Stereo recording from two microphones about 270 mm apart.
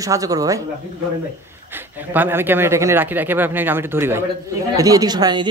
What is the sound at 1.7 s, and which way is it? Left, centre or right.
Speech, centre.